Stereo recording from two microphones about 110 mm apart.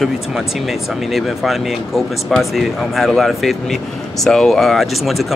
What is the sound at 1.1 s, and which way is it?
Speech, centre (ahead or behind).